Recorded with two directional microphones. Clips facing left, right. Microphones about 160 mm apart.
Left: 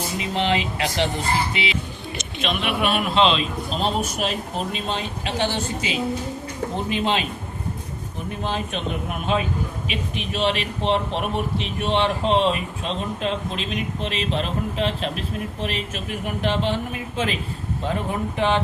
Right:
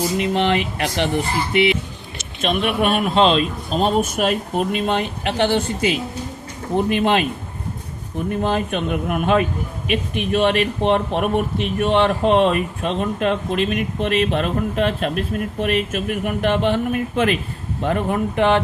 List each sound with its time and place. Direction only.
0.2 s a man's voice: 60° right (ahead or behind)
2.4 s a man's voice: 45° right (ahead or behind)
8.4 s a man's voice: 55° right (ahead or behind)